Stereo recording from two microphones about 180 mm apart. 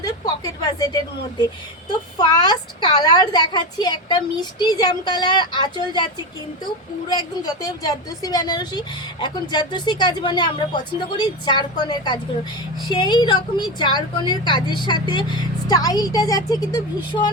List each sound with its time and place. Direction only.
0.0 s a woman's voice: 20° left (ahead or behind)
7.1 s a woman's voice: 25° left (ahead or behind)